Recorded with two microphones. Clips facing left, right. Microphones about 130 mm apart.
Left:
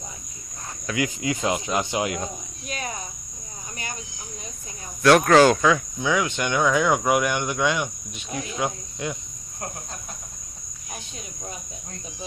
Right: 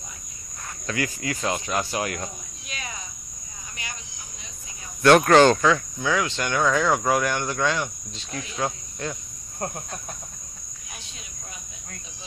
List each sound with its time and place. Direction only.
0.8 s insect: 15° left (ahead or behind)
2.7 s cricket: 45° left (ahead or behind)
5.0 s insect: centre (ahead or behind)